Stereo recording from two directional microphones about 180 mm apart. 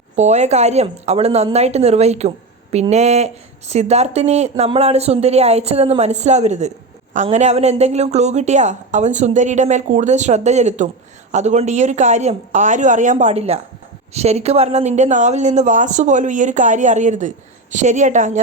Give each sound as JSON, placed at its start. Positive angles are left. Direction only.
{"t": 0.2, "sound": "speech", "side_deg": -40}